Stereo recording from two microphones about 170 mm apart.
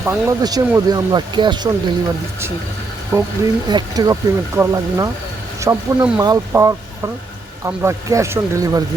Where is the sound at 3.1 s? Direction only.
20° right (ahead or behind).